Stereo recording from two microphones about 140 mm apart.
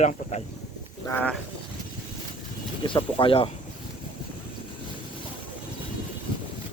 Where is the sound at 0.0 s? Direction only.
55° left (ahead or behind).